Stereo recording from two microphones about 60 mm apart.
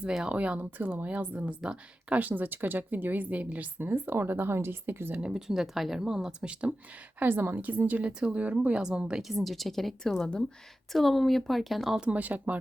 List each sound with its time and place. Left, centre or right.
0.3 s speech: right
3.8 s speech: right
5.2 s speech: centre
6.5 s speech: right
7.2 s speech: right
8.0 s speech: centre
9.2 s speech: centre
11.9 s speech: right